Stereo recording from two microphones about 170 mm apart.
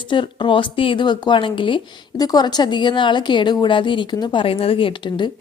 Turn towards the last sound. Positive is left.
turn(degrees=30)  # may be behind; listen again after turning